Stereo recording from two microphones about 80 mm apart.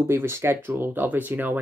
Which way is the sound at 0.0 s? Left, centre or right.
Right.